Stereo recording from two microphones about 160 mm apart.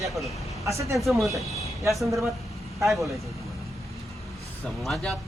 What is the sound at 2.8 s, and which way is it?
Speech, centre (ahead or behind).